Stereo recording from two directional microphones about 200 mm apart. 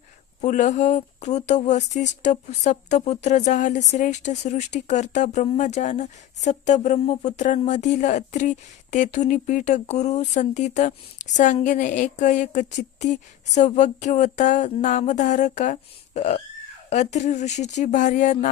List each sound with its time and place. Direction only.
0.4 s speech: 35° left (ahead or behind)